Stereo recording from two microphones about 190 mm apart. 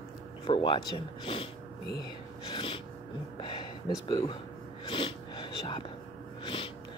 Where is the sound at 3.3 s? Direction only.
25° left (ahead or behind).